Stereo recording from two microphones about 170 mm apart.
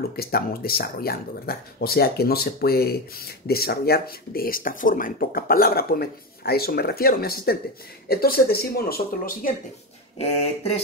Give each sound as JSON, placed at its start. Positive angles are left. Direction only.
{"t": 0.1, "sound": "speech", "side_deg": 65}
{"t": 10.1, "sound": "speech", "side_deg": 40}